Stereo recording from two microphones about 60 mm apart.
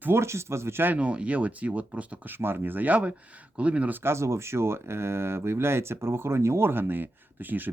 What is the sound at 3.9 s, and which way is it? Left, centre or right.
Speech, right.